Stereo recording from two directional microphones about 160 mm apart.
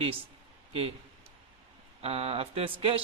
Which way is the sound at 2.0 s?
40° right (ahead or behind).